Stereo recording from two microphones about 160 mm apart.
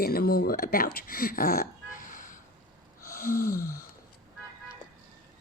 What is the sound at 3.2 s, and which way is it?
Speech, 70° left (ahead or behind).